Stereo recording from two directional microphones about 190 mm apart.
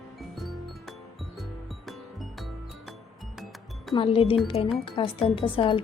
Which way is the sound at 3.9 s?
30° left (ahead or behind).